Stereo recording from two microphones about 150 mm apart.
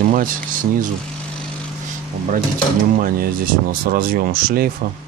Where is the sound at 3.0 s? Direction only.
70° right (ahead or behind).